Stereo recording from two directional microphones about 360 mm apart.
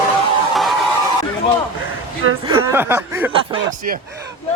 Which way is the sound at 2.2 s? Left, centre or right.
Right.